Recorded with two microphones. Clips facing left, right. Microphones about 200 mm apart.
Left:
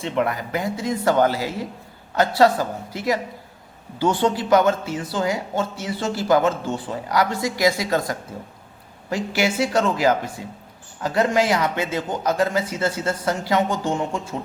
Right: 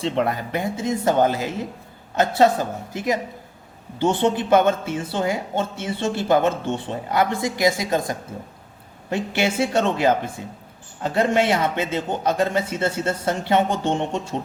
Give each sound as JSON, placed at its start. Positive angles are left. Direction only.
{"t": 0.0, "sound": "a man's voice", "side_deg": -30}
{"t": 4.2, "sound": "a man's voice", "side_deg": -25}
{"t": 10.4, "sound": "speech", "side_deg": 20}
{"t": 11.0, "sound": "a man's voice", "side_deg": -25}